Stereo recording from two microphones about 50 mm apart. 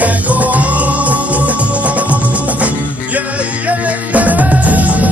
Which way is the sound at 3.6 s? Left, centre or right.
Right.